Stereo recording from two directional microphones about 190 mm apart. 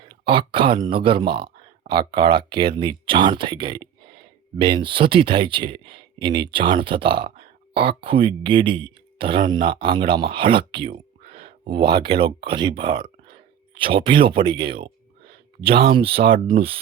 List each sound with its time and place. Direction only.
0.3 s speech: 25° right (ahead or behind)